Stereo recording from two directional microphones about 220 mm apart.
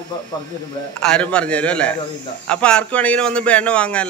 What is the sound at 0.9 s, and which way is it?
A man's voice, 5° left (ahead or behind).